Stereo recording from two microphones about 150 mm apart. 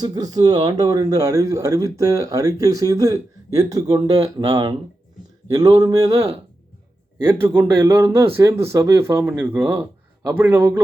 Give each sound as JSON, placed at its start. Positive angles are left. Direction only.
{"t": 0.0, "sound": "speech", "side_deg": -25}
{"t": 7.3, "sound": "speech", "side_deg": -15}